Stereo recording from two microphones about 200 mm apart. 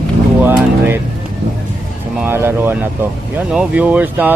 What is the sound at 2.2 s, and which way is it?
Speech, 10° right (ahead or behind).